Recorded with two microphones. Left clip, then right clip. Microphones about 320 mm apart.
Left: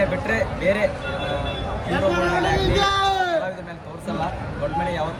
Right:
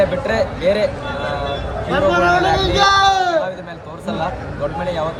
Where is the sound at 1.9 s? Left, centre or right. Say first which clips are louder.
Right 7 dB; centre.